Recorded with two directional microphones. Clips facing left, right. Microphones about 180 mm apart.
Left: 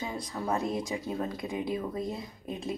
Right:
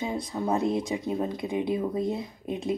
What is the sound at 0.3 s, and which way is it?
Speech, 20° right (ahead or behind).